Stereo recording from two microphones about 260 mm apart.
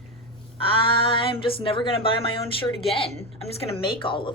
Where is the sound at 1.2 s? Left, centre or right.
Centre.